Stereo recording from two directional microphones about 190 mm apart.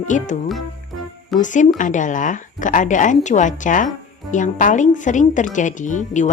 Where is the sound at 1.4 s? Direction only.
40° left (ahead or behind).